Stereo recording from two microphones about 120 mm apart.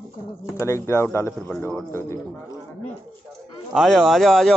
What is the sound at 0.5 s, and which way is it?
Speech, 25° left (ahead or behind).